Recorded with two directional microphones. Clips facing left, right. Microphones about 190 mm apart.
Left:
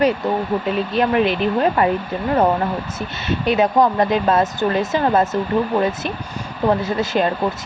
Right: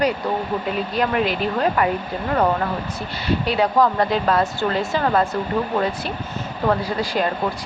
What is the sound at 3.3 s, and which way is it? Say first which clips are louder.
Speech: left 2 dB; 20° left (ahead or behind).